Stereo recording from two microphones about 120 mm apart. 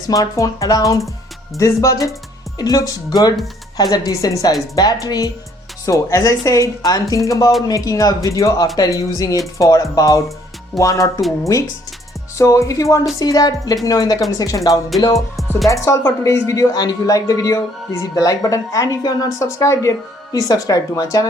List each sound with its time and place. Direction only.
0.1 s a woman's voice: 30° left (ahead or behind)
12.4 s a woman's voice: 25° left (ahead or behind)